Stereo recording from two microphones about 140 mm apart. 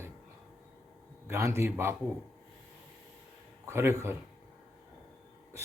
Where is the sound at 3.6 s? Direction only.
20° right (ahead or behind).